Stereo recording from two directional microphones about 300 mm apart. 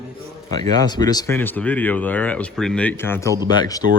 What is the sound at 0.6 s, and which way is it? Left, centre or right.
Speech, centre.